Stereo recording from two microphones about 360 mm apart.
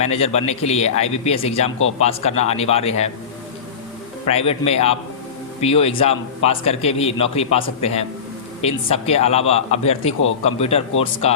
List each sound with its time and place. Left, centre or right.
0.0 s a man's voice: centre
4.3 s a man's voice: centre